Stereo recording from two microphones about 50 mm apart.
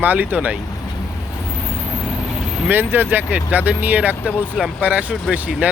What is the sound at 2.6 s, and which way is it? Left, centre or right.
Speech, right.